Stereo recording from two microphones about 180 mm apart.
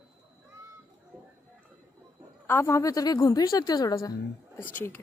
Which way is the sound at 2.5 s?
15° left (ahead or behind).